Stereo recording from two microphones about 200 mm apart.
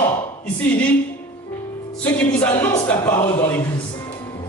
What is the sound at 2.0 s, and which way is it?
A man's voice, 10° left (ahead or behind).